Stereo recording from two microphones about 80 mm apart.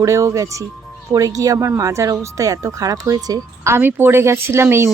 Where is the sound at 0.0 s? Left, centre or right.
Right.